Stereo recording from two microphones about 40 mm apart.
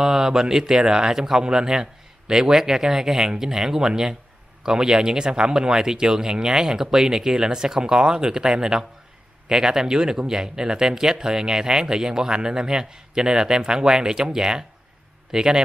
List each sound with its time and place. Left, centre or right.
0.0 s speech: centre